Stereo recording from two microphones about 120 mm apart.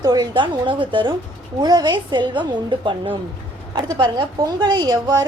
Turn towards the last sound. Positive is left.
turn(degrees=-35)  # may be behind; listen again after turning